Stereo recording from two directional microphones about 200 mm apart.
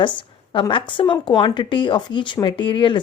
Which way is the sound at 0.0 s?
25° left (ahead or behind).